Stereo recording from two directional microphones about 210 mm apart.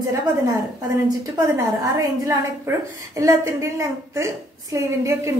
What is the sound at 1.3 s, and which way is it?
A woman's voice, 15° right (ahead or behind).